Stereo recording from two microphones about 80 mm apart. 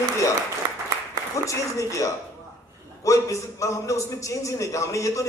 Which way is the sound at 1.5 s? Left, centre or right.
Left.